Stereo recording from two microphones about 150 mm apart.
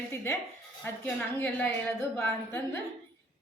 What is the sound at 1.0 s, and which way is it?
A woman's voice, 10° left (ahead or behind).